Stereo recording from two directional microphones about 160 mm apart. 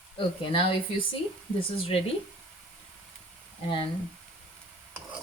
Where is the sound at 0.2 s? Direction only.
35° left (ahead or behind).